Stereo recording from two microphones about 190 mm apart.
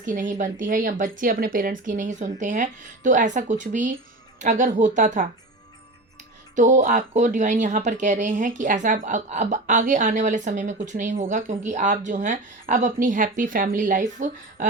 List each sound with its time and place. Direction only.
0.0 s speech: 45° right (ahead or behind)
6.6 s speech: 40° right (ahead or behind)